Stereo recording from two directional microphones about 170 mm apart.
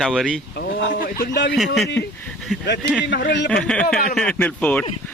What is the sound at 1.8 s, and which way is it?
Speech, 90° left.